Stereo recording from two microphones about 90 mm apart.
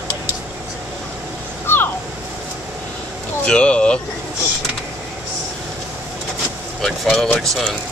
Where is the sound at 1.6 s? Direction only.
25° left (ahead or behind).